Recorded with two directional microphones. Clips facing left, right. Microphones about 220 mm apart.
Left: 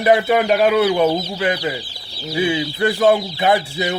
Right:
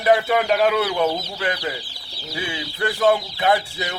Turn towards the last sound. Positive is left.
turn(degrees=20)  # may be behind; listen again after turning